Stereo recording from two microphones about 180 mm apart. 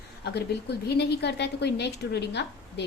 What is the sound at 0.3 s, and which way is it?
A woman's voice, 65° left (ahead or behind).